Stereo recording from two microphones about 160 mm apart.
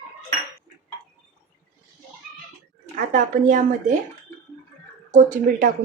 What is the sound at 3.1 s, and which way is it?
Speech, 55° right (ahead or behind).